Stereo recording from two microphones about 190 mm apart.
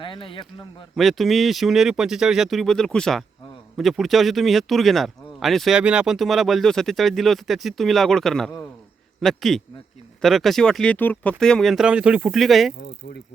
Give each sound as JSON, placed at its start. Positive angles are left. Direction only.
{"t": 0.0, "sound": "a man's voice", "side_deg": 25}
{"t": 0.9, "sound": "speech", "side_deg": 0}
{"t": 12.8, "sound": "speech", "side_deg": 60}